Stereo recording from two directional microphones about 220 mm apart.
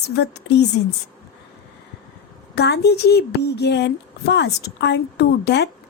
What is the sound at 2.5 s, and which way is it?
Speech, 50° left (ahead or behind).